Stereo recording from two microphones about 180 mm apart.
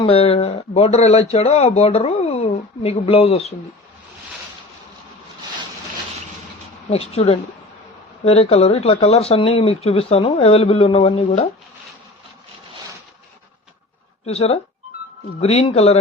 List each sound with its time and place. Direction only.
0.0 s speech: 30° left (ahead or behind)
6.9 s speech: 35° left (ahead or behind)
14.3 s speech: 35° left (ahead or behind)